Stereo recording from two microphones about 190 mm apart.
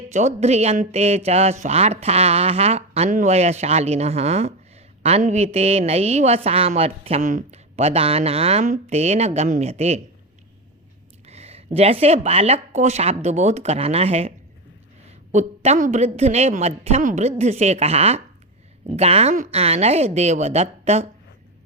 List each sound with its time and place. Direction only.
0.1 s speech: 35° right (ahead or behind)
11.3 s speech: 35° right (ahead or behind)